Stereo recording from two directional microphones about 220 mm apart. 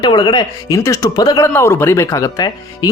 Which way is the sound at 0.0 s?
20° left (ahead or behind).